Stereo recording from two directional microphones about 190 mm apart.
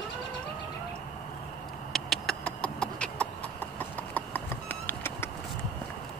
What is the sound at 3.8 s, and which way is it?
Horse, 10° left (ahead or behind).